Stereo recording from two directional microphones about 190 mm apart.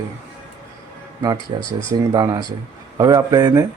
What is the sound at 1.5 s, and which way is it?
Speech, 25° right (ahead or behind).